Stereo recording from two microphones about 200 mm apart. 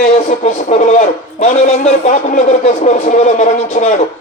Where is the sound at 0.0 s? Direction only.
35° left (ahead or behind).